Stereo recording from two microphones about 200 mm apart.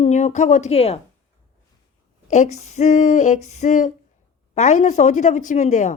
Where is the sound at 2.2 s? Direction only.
35° left (ahead or behind).